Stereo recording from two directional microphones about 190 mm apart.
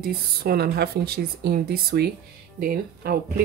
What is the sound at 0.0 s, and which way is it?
Speech, 55° right (ahead or behind).